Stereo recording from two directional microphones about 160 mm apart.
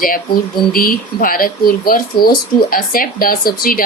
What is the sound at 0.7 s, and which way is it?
A woman's voice, 65° left (ahead or behind).